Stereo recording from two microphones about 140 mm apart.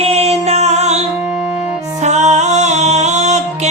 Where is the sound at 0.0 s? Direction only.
45° right (ahead or behind).